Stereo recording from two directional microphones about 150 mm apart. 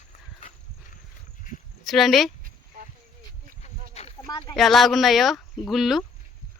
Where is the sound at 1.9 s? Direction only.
Centre (ahead or behind).